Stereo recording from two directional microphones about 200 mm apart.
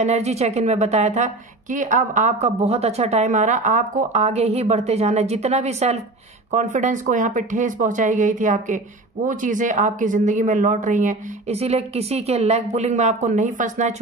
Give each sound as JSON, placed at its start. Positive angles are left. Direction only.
{"t": 0.0, "sound": "speech", "side_deg": -35}